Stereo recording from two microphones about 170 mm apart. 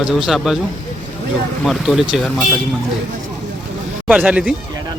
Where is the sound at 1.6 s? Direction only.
Centre (ahead or behind).